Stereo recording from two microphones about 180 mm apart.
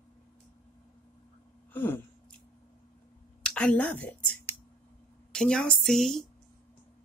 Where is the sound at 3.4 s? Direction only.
5° left (ahead or behind).